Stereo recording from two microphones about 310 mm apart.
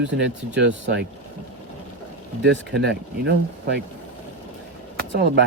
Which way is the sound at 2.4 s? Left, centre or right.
Right.